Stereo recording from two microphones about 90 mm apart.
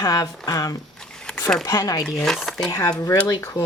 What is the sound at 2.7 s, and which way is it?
Speech, 40° left (ahead or behind).